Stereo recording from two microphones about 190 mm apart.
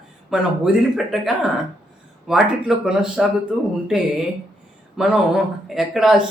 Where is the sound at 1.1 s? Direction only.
Centre (ahead or behind).